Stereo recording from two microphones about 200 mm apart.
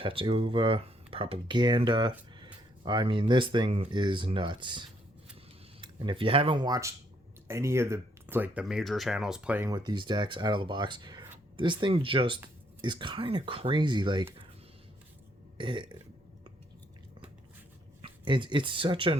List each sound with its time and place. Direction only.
0.0 s speech: 25° right (ahead or behind); by 9.6 s 5° right (ahead or behind)
9.6 s speech: 20° right (ahead or behind)
15.5 s burping: 25° right (ahead or behind)
18.0 s speech: 25° right (ahead or behind)